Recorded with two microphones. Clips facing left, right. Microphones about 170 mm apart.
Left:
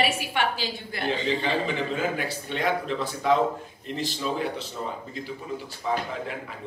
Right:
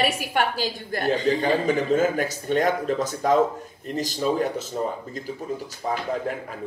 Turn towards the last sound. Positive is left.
turn(degrees=-45)  # may be behind; listen again after turning